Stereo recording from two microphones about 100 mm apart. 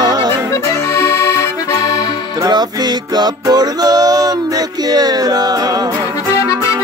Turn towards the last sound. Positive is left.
turn(degrees=-40)  # may be behind; listen again after turning